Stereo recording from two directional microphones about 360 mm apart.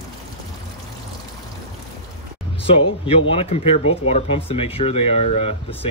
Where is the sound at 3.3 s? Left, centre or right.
Centre.